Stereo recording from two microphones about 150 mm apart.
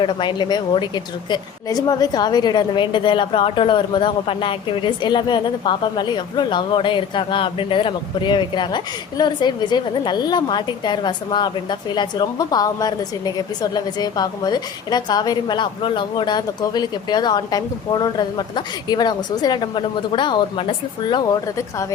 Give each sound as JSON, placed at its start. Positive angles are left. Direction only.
{"t": 0.0, "sound": "a woman's voice", "side_deg": 30}